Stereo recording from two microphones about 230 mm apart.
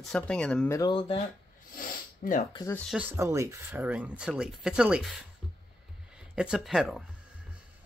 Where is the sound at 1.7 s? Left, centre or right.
Left.